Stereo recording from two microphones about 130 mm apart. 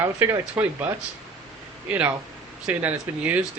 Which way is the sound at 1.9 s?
15° right (ahead or behind).